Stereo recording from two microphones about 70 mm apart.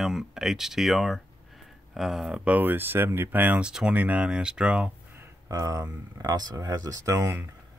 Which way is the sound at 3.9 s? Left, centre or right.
Centre.